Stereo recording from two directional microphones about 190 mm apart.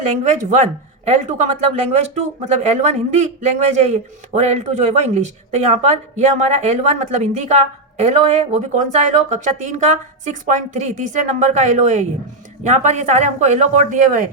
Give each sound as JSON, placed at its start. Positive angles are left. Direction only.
{"t": 0.3, "sound": "speech", "side_deg": -35}